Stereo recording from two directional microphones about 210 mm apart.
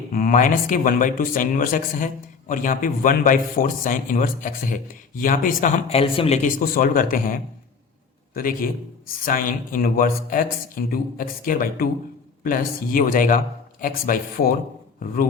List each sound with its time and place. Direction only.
0.1 s a man's voice: 40° left (ahead or behind)